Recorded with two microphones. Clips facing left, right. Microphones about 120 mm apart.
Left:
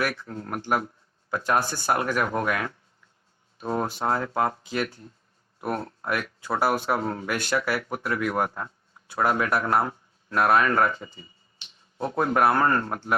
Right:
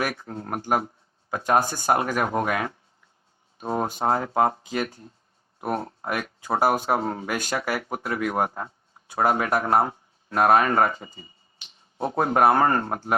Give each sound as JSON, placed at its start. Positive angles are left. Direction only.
{"t": 0.0, "sound": "speech", "side_deg": -45}
{"t": 0.3, "sound": "speech", "side_deg": -35}
{"t": 7.0, "sound": "speech", "side_deg": -30}